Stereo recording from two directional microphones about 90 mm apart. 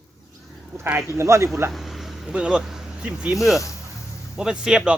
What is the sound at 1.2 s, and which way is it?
Speech, 30° right (ahead or behind).